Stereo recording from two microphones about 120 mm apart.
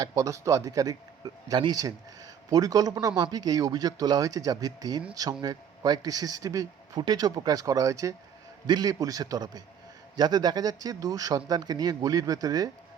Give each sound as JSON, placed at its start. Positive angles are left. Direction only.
{"t": 0.0, "sound": "speech", "side_deg": -30}